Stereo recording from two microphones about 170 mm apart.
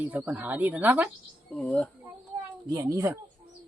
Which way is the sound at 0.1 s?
10° right (ahead or behind).